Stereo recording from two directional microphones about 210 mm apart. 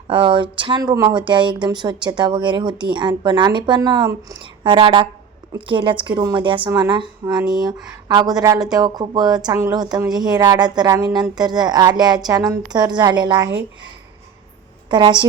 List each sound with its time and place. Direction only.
0.1 s speech: 25° right (ahead or behind)
14.8 s a woman's voice: 20° right (ahead or behind)